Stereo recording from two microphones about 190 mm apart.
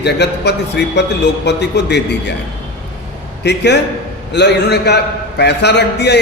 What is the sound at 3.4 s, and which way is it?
A man's voice, 65° left (ahead or behind).